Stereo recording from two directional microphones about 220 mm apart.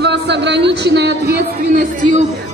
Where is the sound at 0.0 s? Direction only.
50° right (ahead or behind).